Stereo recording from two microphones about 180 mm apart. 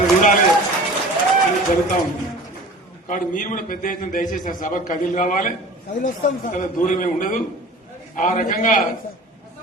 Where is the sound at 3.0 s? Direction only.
45° left (ahead or behind).